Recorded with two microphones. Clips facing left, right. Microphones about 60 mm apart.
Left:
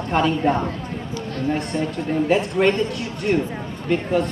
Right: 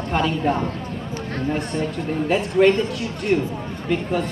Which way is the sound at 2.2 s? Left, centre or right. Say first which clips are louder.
Right 3 dB; centre.